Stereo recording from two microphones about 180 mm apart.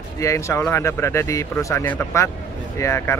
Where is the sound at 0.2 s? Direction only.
15° left (ahead or behind).